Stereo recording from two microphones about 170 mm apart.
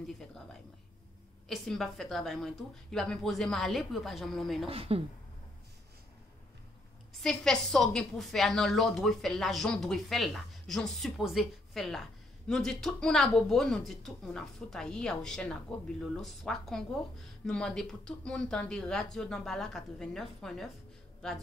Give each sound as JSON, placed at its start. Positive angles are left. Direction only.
{"t": 1.5, "sound": "a woman's voice", "side_deg": 0}
{"t": 4.6, "sound": "speech", "side_deg": -35}
{"t": 7.2, "sound": "a woman's voice", "side_deg": 5}